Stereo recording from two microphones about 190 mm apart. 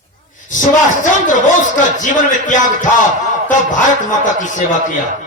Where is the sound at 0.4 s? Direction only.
40° left (ahead or behind).